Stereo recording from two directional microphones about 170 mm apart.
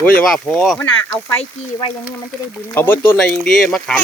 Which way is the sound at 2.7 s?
10° left (ahead or behind).